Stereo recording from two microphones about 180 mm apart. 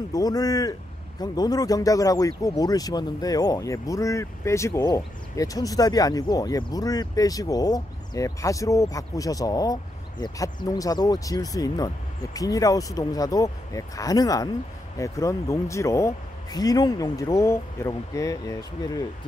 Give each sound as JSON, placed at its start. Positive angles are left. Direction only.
{"t": 0.1, "sound": "speech", "side_deg": 20}